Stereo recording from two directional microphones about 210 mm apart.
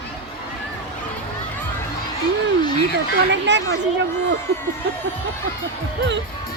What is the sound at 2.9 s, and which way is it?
Speech, 55° right (ahead or behind).